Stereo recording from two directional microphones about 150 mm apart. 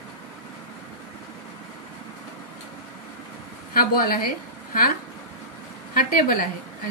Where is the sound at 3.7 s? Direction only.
80° left.